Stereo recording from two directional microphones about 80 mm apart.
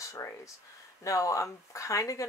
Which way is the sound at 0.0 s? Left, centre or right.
Left.